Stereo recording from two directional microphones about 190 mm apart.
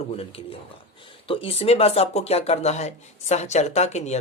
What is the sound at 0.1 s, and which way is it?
Speech, 30° left (ahead or behind).